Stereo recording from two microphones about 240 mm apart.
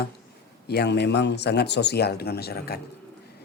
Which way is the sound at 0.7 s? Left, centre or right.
Left.